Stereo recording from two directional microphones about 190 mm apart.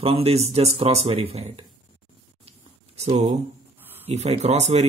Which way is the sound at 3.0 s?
35° right (ahead or behind).